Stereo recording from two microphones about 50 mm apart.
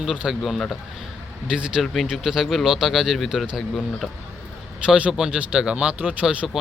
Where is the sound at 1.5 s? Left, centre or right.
Centre.